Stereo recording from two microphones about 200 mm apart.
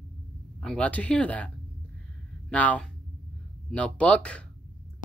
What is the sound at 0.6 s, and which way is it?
Speech, 5° left (ahead or behind).